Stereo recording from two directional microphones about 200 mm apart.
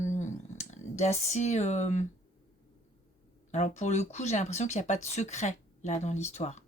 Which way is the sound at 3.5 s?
35° left (ahead or behind).